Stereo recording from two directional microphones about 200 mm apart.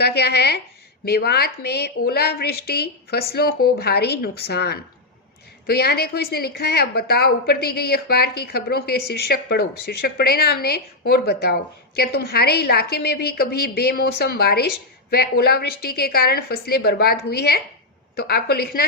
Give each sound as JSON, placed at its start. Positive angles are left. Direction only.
{"t": 0.0, "sound": "a woman's voice", "side_deg": 55}